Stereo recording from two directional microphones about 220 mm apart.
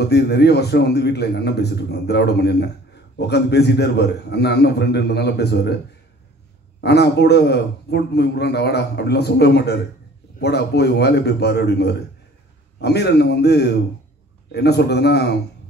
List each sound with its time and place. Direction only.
0.0 s a man's voice: 50° left (ahead or behind)
6.8 s a man's voice: 50° left (ahead or behind)